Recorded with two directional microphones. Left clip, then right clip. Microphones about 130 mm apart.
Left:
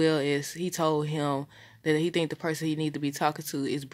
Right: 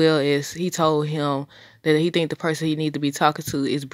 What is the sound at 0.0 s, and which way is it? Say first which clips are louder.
Speech: right 7 dB; 40° right (ahead or behind).